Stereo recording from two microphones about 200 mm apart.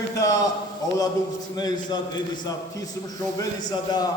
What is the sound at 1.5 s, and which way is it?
Speech, 20° left (ahead or behind).